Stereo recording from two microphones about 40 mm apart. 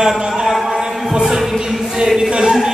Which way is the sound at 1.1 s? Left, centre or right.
Centre.